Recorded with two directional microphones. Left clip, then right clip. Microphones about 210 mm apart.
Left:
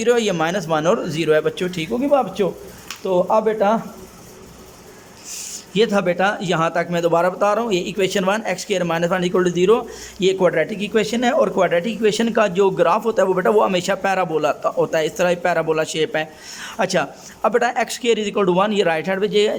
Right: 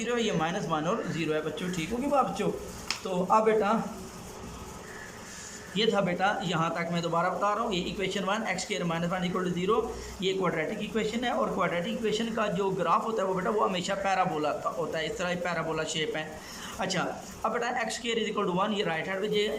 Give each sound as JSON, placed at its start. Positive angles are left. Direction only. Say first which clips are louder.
{"t": 0.0, "sound": "speech", "louder": "left 12 dB", "side_deg": 55}
{"t": 5.7, "sound": "a man's voice", "louder": "left 10 dB", "side_deg": 55}